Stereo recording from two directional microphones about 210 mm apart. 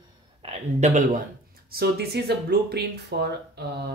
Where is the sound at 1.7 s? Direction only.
50° right (ahead or behind).